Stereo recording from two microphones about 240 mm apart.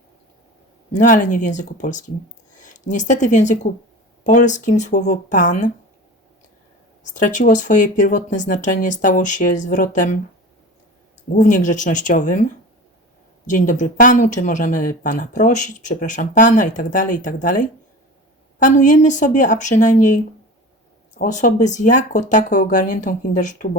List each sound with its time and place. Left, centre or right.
0.9 s speech: left
7.1 s speech: left
11.3 s speech: left
13.5 s speech: left